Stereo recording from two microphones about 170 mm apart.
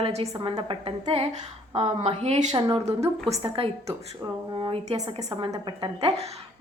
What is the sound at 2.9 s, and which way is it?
Speech, 15° right (ahead or behind).